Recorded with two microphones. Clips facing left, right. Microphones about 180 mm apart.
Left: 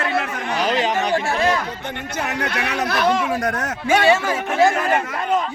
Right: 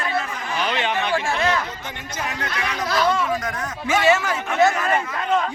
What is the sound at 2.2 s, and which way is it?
Speech, 70° left (ahead or behind).